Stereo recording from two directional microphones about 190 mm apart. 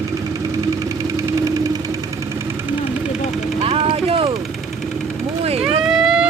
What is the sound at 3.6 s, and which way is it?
Vehicle, 30° right (ahead or behind).